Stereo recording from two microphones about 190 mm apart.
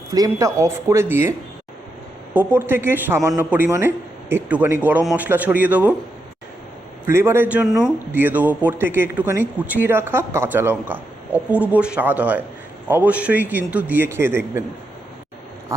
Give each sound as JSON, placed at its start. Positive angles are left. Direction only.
{"t": 0.1, "sound": "a man's voice", "side_deg": -20}
{"t": 2.3, "sound": "a man's voice", "side_deg": -10}
{"t": 7.0, "sound": "a man's voice", "side_deg": -15}